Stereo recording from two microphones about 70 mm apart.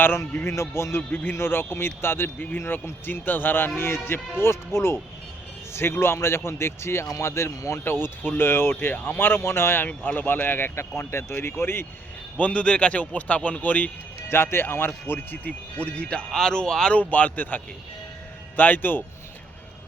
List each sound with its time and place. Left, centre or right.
0.0 s a man's voice: left
12.4 s a man's voice: centre
14.3 s speech: left
15.4 s speech: centre
17.0 s a man's voice: left